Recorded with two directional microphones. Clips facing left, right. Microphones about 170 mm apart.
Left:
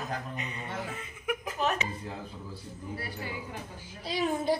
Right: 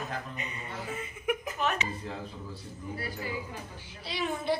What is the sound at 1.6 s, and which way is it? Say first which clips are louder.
Speech: left 1 dB; 35° left (ahead or behind).